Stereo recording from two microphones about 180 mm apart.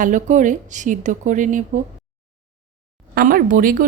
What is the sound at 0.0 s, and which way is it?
A woman's voice, 45° right (ahead or behind).